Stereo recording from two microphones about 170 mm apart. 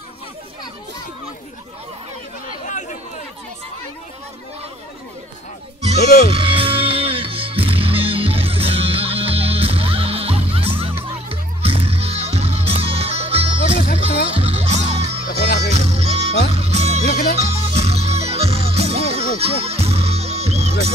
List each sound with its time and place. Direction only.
2.6 s chatter: 45° left (ahead or behind)
6.0 s speech: 60° left (ahead or behind)
6.3 s music: 30° right (ahead or behind)
15.2 s music: 65° left (ahead or behind)
15.7 s music: 40° right (ahead or behind)
17.0 s music: 60° left (ahead or behind)
17.4 s music: 35° right (ahead or behind)